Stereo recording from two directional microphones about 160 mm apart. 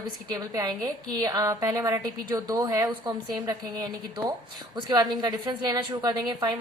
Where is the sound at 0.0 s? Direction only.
25° right (ahead or behind).